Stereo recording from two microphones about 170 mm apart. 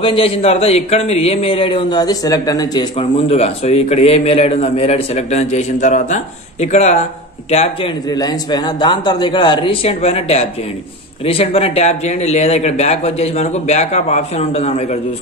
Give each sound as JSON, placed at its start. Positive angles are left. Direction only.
{"t": 0.0, "sound": "speech", "side_deg": 30}
{"t": 8.1, "sound": "a man's voice", "side_deg": 25}